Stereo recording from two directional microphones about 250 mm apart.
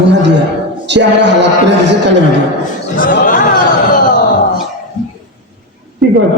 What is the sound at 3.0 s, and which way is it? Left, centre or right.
Chatter, left.